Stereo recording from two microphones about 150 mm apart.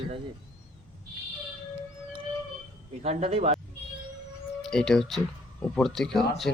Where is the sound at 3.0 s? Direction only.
45° right (ahead or behind).